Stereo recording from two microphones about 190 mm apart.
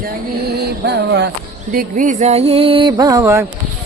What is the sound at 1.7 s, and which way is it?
Music, 45° right (ahead or behind).